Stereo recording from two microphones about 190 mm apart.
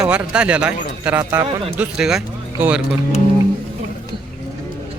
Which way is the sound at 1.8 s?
5° right (ahead or behind).